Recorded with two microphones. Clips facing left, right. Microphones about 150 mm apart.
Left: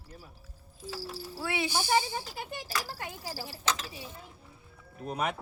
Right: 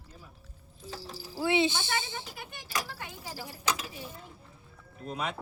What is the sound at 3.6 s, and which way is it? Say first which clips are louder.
Mechanisms: even; 10° right (ahead or behind).